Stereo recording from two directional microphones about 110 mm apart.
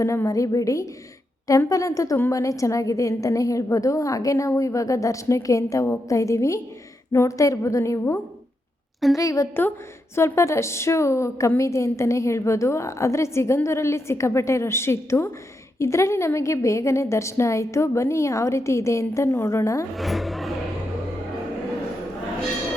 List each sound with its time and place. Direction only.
0.0 s a woman's voice: 25° left (ahead or behind)
20.0 s speech: centre (ahead or behind)